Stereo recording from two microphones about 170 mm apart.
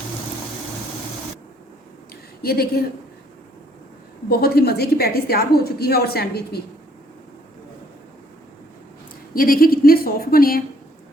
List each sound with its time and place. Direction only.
2.4 s a woman's voice: 65° left (ahead or behind)
4.3 s a woman's voice: 65° left (ahead or behind)
9.3 s a woman's voice: 60° left (ahead or behind)